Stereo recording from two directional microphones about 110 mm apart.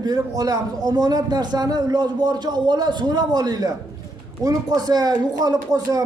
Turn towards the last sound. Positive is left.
turn(degrees=-35)  # may be behind; listen again after turning